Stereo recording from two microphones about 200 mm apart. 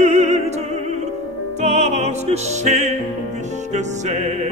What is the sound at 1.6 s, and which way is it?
Music, 35° right (ahead or behind).